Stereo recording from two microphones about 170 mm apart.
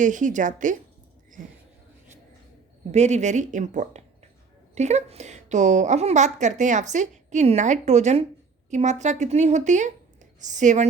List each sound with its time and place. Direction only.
0.0 s a woman's voice: 50° right (ahead or behind)
2.9 s a woman's voice: 40° right (ahead or behind)